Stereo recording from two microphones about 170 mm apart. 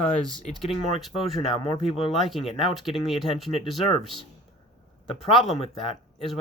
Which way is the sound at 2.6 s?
Centre (ahead or behind).